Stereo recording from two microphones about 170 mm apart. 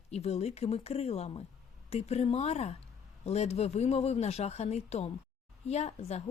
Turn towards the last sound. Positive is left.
turn(degrees=40)  # may be behind; listen again after turning